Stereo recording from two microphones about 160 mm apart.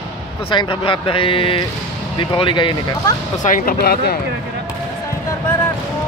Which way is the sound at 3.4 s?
60° left (ahead or behind).